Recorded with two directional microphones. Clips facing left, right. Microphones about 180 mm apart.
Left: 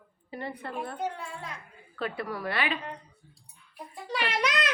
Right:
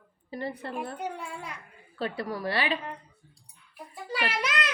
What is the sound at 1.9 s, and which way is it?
Speech, 30° right (ahead or behind).